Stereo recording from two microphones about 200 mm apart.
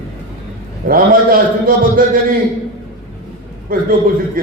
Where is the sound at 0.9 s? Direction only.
45° right (ahead or behind).